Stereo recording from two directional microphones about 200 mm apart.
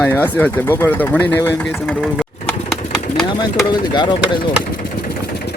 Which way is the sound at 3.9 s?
20° left (ahead or behind).